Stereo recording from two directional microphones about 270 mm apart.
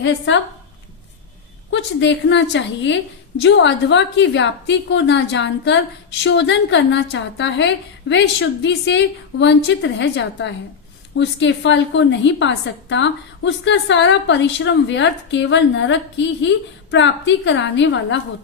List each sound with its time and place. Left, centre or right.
0.3 s a woman's voice: left
1.7 s a woman's voice: left